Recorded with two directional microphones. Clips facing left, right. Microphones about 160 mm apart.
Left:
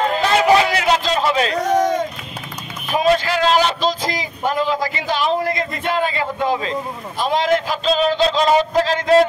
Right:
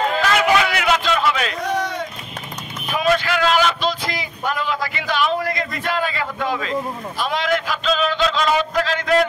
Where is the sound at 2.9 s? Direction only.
35° left (ahead or behind).